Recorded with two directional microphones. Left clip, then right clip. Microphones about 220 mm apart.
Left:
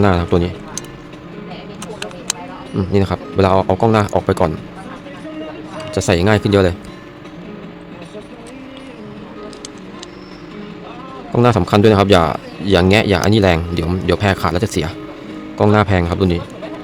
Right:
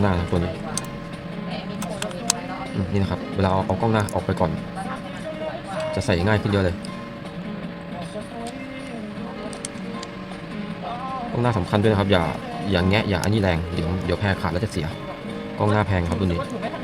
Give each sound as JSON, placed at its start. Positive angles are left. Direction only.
{"t": 0.0, "sound": "speech", "side_deg": 45}
{"t": 2.9, "sound": "speech", "side_deg": 45}
{"t": 5.9, "sound": "speech", "side_deg": 50}
{"t": 11.3, "sound": "speech", "side_deg": 50}